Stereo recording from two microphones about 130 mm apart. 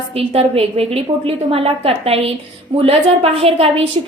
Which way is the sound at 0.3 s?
50° right (ahead or behind).